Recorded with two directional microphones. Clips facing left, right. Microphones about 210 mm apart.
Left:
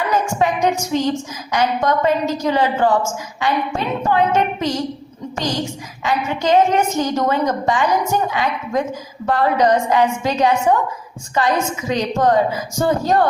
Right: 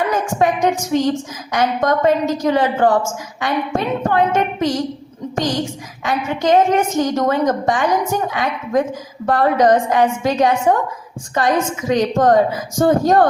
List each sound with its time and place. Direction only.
0.1 s a woman's voice: 50° right (ahead or behind)
6.0 s a woman's voice: 50° right (ahead or behind)